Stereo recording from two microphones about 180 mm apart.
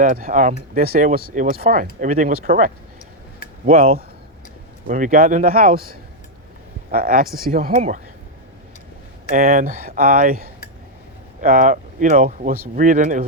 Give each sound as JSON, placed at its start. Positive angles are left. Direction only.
{"t": 0.0, "sound": "speech", "side_deg": -50}
{"t": 9.3, "sound": "speech", "side_deg": -50}